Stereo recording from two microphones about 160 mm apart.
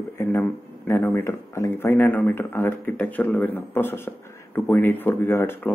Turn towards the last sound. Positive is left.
turn(degrees=15)  # may be behind; listen again after turning